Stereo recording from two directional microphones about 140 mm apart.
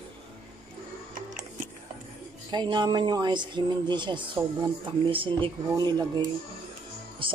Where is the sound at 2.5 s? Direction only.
30° right (ahead or behind).